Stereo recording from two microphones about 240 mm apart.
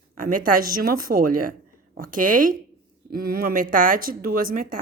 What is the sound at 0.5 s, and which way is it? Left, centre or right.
A woman's voice, right.